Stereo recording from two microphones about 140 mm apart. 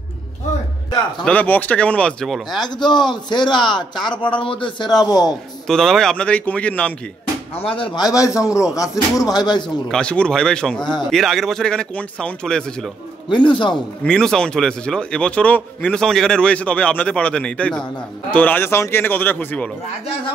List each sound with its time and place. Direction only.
1.2 s a man's voice: 10° left (ahead or behind)
2.6 s a man's voice: 30° left (ahead or behind)
5.7 s a man's voice: 5° left (ahead or behind)
7.7 s a man's voice: 35° left (ahead or behind)
9.8 s speech: 5° left (ahead or behind)
13.3 s a man's voice: 35° left (ahead or behind)
14.0 s a man's voice: 5° left (ahead or behind)